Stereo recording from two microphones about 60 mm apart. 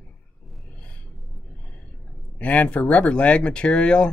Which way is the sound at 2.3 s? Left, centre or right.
Left.